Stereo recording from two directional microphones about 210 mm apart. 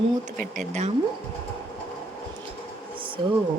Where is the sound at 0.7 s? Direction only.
35° right (ahead or behind).